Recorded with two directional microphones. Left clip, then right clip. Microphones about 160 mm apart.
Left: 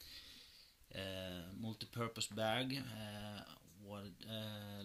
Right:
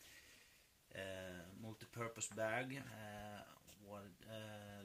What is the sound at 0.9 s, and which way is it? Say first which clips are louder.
Speech: left 3 dB; 35° left (ahead or behind).